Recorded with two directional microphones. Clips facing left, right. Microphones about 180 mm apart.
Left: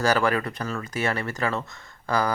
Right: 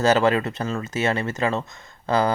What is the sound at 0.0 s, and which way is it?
Speech, 25° right (ahead or behind).